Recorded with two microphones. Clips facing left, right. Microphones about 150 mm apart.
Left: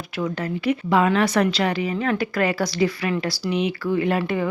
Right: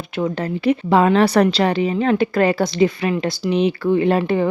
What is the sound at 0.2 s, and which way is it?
A woman's voice, 30° right (ahead or behind).